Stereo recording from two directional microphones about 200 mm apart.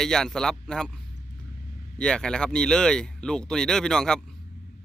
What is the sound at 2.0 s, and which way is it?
Speech, 5° left (ahead or behind).